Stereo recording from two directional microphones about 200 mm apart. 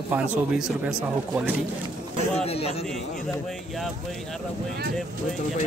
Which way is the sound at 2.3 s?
30° left (ahead or behind).